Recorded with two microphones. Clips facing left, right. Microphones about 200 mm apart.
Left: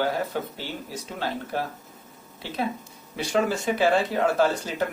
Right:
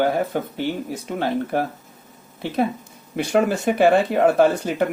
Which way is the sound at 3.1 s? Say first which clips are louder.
Right 5 dB; 55° right (ahead or behind).